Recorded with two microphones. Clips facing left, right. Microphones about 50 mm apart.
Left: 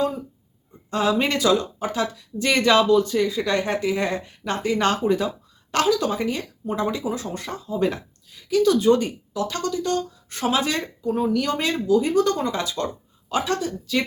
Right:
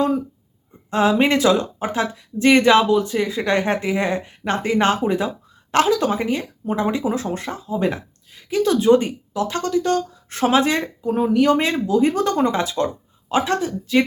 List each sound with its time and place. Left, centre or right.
0.9 s speech: right
7.5 s speech: centre
8.3 s speech: right